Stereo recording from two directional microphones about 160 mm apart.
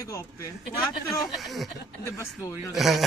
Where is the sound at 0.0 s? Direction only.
20° left (ahead or behind).